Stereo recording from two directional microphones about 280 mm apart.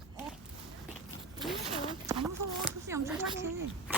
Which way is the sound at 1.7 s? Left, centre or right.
Centre.